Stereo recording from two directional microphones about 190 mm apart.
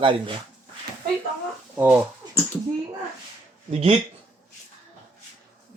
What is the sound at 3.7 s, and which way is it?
Speech, 30° right (ahead or behind).